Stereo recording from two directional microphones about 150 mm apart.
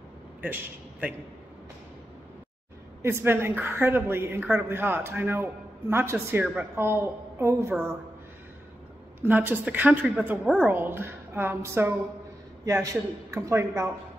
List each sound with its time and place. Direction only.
0.4 s a man's voice: 10° right (ahead or behind)
3.0 s a woman's voice: 15° right (ahead or behind)
9.2 s a woman's voice: 15° right (ahead or behind)
10.4 s a woman's voice: centre (ahead or behind)
10.7 s a woman's voice: 15° right (ahead or behind)